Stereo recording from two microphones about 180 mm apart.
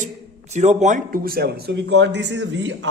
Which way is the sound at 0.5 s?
40° right (ahead or behind).